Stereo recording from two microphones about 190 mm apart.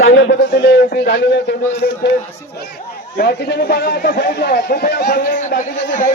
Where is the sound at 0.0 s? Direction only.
85° left; by 1.4 s 65° left (ahead or behind).